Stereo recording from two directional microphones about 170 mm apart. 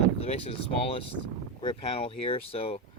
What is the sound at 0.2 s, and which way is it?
Speech, 35° left (ahead or behind).